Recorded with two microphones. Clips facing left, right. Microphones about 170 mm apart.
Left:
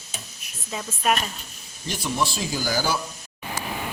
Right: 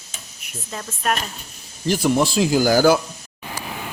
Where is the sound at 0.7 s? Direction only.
5° left (ahead or behind).